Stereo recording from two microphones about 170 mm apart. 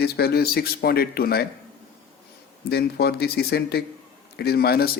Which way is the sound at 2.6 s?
70° left (ahead or behind).